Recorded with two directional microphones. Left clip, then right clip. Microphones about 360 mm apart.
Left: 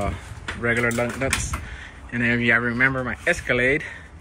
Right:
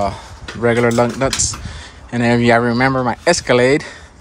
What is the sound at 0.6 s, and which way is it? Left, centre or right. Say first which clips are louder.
Speech: right 8 dB; right.